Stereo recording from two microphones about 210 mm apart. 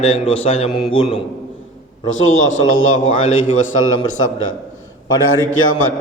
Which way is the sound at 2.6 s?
75° left (ahead or behind).